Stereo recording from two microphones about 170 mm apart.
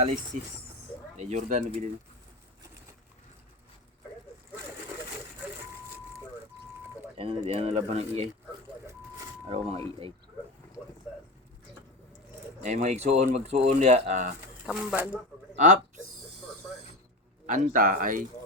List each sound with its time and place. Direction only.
0.3 s speech: 45° right (ahead or behind)
7.2 s speech: 35° right (ahead or behind)
9.5 s speech: 35° right (ahead or behind)
12.6 s speech: 45° right (ahead or behind)
14.7 s speech: 5° right (ahead or behind)
15.5 s speech: 45° right (ahead or behind)
17.4 s speech: 50° right (ahead or behind)